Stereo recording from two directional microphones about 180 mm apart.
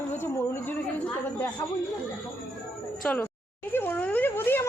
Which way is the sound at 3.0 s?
5° left (ahead or behind).